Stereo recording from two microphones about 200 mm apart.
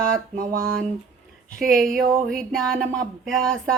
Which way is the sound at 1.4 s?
Centre (ahead or behind).